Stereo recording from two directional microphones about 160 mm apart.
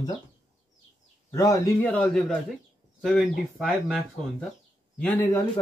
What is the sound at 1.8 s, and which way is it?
A man's voice, 10° left (ahead or behind).